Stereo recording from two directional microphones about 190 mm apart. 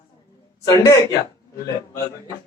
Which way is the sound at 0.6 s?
20° left (ahead or behind).